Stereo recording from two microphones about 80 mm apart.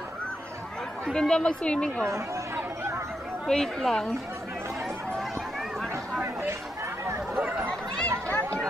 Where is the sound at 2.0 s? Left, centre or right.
Right.